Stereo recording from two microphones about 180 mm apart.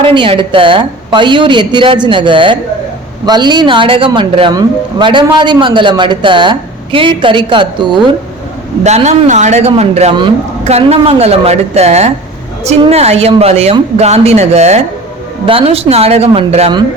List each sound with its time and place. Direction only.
0.0 s speech: 30° right (ahead or behind)
8.8 s speech: 40° right (ahead or behind)